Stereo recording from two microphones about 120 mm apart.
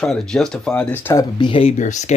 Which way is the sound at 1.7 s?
85° left.